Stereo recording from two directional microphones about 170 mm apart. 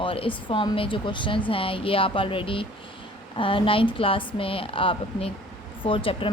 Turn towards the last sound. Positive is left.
turn(degrees=30)  # may be behind; listen again after turning